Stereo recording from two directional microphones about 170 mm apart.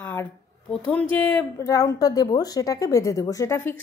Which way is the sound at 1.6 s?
20° left (ahead or behind).